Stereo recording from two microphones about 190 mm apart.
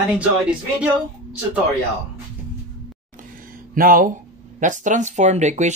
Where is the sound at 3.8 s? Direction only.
50° right (ahead or behind).